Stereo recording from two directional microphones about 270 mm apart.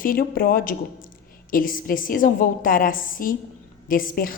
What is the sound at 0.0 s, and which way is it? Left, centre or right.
A woman's voice, left.